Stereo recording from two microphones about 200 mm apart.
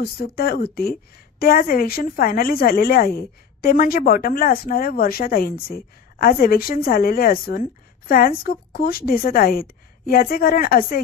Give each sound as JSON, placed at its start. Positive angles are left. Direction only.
{"t": 0.0, "sound": "a woman's voice", "side_deg": 50}